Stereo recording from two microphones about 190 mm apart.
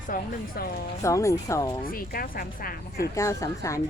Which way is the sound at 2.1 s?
50° left (ahead or behind).